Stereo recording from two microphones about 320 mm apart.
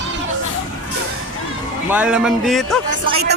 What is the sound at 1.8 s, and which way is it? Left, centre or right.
Speech, centre.